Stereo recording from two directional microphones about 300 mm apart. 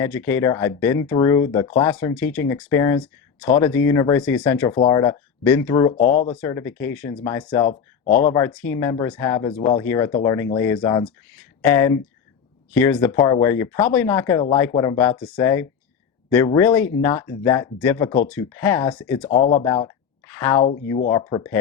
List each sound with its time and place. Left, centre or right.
0.2 s speech: centre
4.7 s speech: centre
6.0 s speech: left
6.4 s speech: centre; by 8.3 s left
8.3 s speech: centre
9.8 s speech: centre